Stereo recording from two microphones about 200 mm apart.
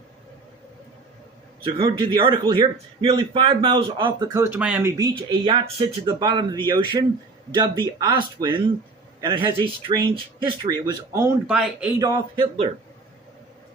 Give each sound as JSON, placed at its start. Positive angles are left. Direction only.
{"t": 1.6, "sound": "a man's voice", "side_deg": -25}
{"t": 4.4, "sound": "a man's voice", "side_deg": -10}
{"t": 11.5, "sound": "speech", "side_deg": -5}
{"t": 11.9, "sound": "speech", "side_deg": -15}